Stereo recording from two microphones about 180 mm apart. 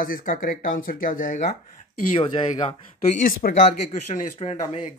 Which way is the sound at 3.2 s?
45° left (ahead or behind).